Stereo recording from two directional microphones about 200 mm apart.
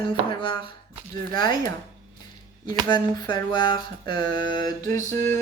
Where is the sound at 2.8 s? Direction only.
20° left (ahead or behind).